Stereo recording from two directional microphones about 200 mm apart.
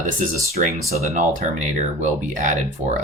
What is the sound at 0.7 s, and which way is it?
Speech, 35° right (ahead or behind).